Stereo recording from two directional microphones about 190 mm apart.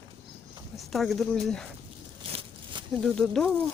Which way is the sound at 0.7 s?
Centre (ahead or behind).